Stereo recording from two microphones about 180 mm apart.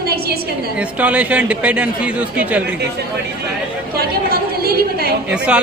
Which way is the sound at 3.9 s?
60° right (ahead or behind).